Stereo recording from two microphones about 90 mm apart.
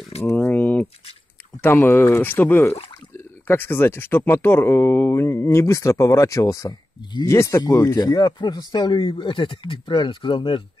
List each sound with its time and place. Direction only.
0.2 s a sound: 30° left (ahead or behind)
1.6 s speech: 25° left (ahead or behind)
8.0 s speech: 50° left (ahead or behind)